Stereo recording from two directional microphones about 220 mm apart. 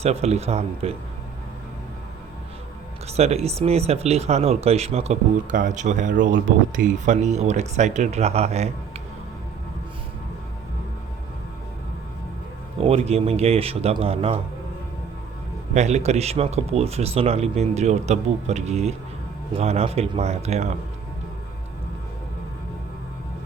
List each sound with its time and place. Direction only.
0.0 s speech: 30° right (ahead or behind)
3.1 s speech: 30° right (ahead or behind)
12.8 s speech: 25° right (ahead or behind)
15.7 s speech: 30° right (ahead or behind)